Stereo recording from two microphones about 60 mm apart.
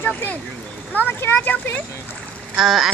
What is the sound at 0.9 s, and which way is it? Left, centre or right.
Speech, left.